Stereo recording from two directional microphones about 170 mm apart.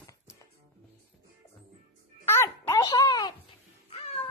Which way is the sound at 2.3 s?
15° left (ahead or behind).